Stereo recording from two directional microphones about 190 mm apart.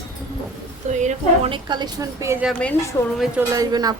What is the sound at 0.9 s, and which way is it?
Speech, 40° right (ahead or behind).